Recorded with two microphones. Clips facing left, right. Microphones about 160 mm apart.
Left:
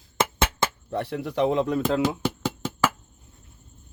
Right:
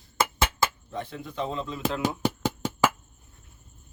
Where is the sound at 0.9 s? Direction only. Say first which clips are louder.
Left 7 dB; 70° left (ahead or behind).